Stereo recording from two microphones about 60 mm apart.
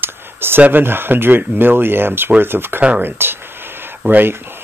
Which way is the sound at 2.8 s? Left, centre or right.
Right.